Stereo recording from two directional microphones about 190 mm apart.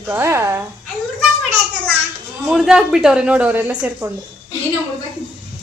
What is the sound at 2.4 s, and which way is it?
A woman's voice, centre (ahead or behind).